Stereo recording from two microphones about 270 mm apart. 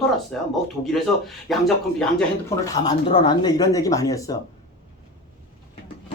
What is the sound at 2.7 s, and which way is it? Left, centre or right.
Speech, centre.